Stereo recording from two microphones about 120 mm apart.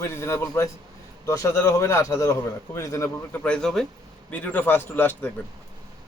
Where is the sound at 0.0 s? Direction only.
25° left (ahead or behind).